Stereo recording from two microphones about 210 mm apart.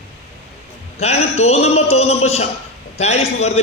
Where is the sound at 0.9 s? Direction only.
30° left (ahead or behind).